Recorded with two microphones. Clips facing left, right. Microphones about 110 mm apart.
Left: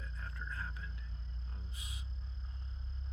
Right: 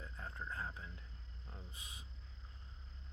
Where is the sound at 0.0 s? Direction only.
25° right (ahead or behind).